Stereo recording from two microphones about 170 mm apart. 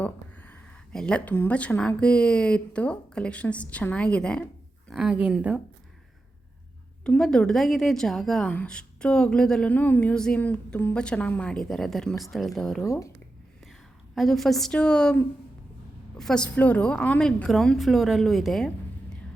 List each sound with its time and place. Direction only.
0.0 s a woman's voice: 10° left (ahead or behind); by 5.5 s 5° right (ahead or behind)
7.0 s a woman's voice: 5° left (ahead or behind)
12.8 s speech: 20° left (ahead or behind)
14.2 s a woman's voice: centre (ahead or behind)